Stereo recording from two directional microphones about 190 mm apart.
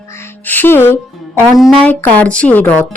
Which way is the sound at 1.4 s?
Centre (ahead or behind).